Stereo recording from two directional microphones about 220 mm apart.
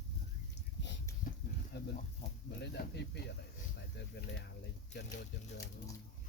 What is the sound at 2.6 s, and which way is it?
Speech, 50° left (ahead or behind).